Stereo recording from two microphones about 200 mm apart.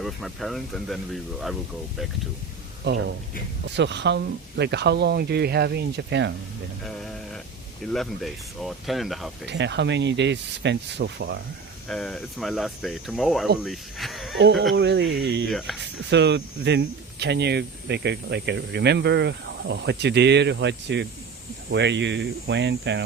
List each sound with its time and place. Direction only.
0.0 s speech: centre (ahead or behind)
2.8 s speech: 60° right (ahead or behind)
7.9 s speech: centre (ahead or behind)
9.5 s speech: 60° right (ahead or behind)
11.9 s speech: 5° left (ahead or behind)
14.8 s speech: 60° right (ahead or behind)
15.4 s speech: centre (ahead or behind)
15.8 s speech: 60° right (ahead or behind)